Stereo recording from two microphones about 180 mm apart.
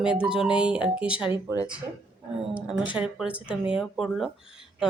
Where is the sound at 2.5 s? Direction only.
5° right (ahead or behind).